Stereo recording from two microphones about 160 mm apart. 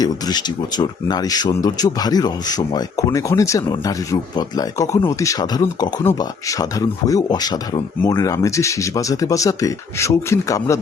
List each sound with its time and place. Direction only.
0.0 s speech: 25° left (ahead or behind)